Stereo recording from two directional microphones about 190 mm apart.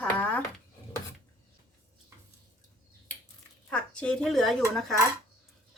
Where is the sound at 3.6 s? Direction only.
5° left (ahead or behind).